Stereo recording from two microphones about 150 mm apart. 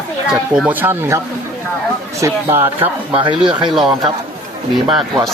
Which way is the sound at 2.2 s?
20° right (ahead or behind).